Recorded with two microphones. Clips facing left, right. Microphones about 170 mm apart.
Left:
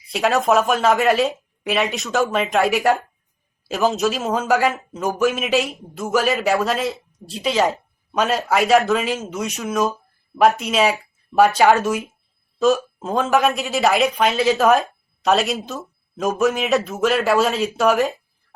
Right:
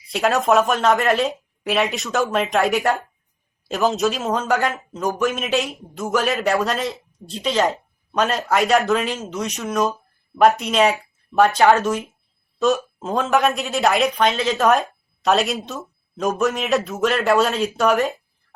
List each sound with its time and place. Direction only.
0.1 s a woman's voice: centre (ahead or behind)